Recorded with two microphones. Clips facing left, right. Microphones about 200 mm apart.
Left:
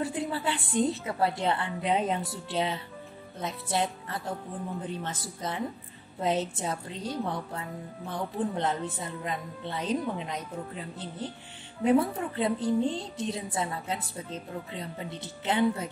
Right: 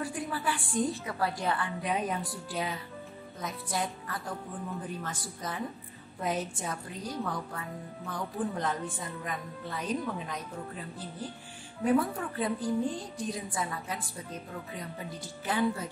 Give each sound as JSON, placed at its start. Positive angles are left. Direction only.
{"t": 0.0, "sound": "a woman's voice", "side_deg": 25}
{"t": 11.8, "sound": "a woman's voice", "side_deg": 25}